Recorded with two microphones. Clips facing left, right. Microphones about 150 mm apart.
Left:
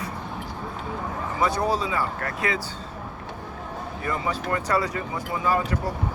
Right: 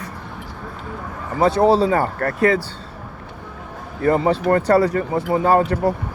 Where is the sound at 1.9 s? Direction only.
50° right (ahead or behind).